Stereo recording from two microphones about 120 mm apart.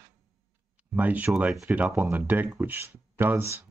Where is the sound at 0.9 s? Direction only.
15° right (ahead or behind).